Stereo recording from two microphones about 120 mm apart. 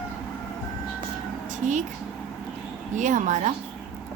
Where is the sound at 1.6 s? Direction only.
90° right.